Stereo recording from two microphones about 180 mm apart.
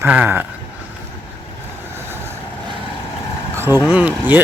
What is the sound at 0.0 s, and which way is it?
Speech, 10° right (ahead or behind).